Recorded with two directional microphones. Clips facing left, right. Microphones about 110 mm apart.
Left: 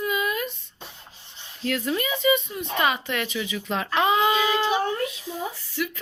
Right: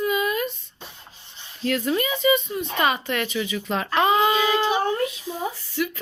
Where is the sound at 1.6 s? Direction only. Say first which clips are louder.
Right 3 dB; centre (ahead or behind).